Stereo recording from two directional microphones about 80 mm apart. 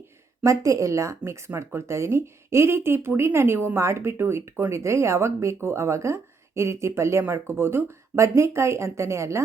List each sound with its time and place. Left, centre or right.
0.4 s speech: right